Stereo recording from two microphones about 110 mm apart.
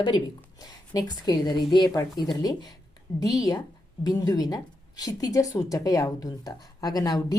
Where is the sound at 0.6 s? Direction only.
35° left (ahead or behind).